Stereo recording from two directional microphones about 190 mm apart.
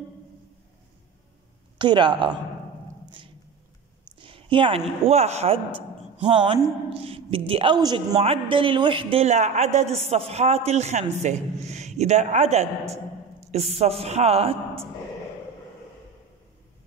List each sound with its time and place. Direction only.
1.8 s speech: 25° right (ahead or behind)
4.2 s a sound: 25° right (ahead or behind)
5.0 s a woman's voice: 35° right (ahead or behind)